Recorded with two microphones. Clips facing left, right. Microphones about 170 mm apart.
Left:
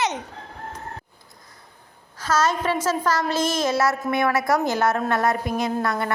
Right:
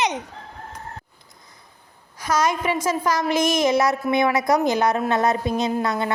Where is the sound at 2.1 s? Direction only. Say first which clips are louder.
Even; 15° right (ahead or behind).